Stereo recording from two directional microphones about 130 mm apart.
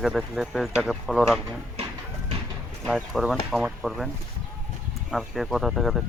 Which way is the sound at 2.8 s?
Centre (ahead or behind).